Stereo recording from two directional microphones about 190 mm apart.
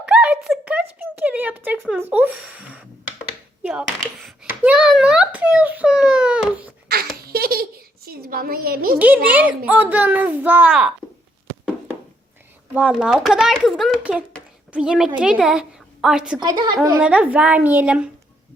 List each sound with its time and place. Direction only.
0.0 s a sound: 5° right (ahead or behind)
3.6 s a child's voice: 5° right (ahead or behind)
7.3 s a sound: 55° right (ahead or behind)
9.0 s a child's voice: 10° right (ahead or behind)
12.7 s a child's voice: 5° right (ahead or behind)
16.4 s a woman's voice: 25° right (ahead or behind)
17.0 s a child's voice: 5° right (ahead or behind)